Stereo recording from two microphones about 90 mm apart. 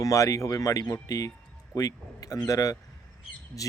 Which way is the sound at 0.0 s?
35° left (ahead or behind).